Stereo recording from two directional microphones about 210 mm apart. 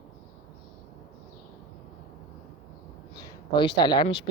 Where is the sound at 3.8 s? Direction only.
20° left (ahead or behind).